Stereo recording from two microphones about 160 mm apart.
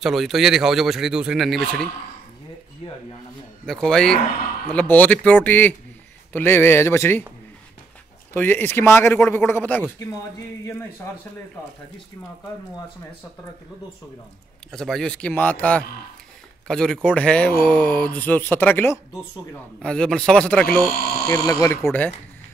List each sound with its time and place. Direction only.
0.0 s speech: centre (ahead or behind)
3.6 s speech: 5° left (ahead or behind)
8.3 s speech: 10° left (ahead or behind)
14.7 s speech: centre (ahead or behind)
21.3 s speech: 20° left (ahead or behind)